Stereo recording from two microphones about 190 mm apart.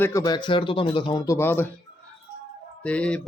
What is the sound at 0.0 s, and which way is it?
Speech, 15° left (ahead or behind).